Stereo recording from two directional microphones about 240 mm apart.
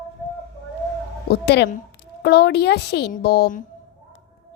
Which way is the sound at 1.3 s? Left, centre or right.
Left.